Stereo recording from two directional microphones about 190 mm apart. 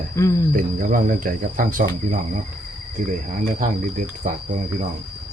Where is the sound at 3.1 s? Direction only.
45° right (ahead or behind).